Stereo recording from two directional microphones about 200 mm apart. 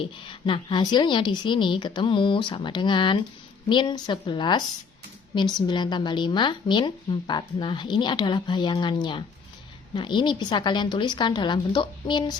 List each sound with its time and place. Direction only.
0.0 s a woman's voice: 25° left (ahead or behind)